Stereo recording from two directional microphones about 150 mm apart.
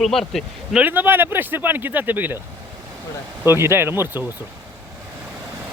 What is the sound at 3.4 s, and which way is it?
Speech, 15° right (ahead or behind).